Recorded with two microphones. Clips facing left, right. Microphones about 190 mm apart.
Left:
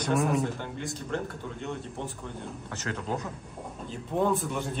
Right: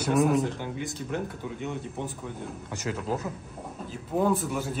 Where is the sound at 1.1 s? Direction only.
15° right (ahead or behind).